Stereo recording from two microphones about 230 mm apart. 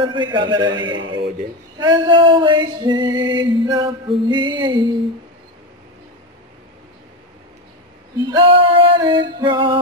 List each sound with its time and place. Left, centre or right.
0.0 s male singing: centre
8.3 s male singing: right